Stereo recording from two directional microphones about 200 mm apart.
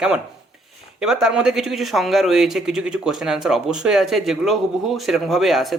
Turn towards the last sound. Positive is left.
turn(degrees=0)  # may be behind; listen again after turning